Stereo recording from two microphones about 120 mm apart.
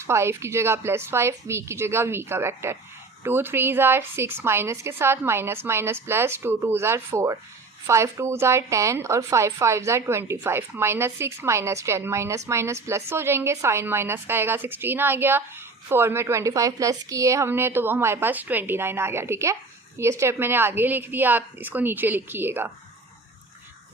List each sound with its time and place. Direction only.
0.0 s a woman's voice: 20° right (ahead or behind)